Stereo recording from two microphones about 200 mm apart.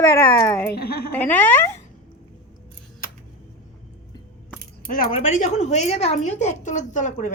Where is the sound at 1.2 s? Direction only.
10° left (ahead or behind).